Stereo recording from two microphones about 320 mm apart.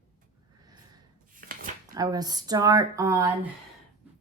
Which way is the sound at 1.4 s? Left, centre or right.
Right.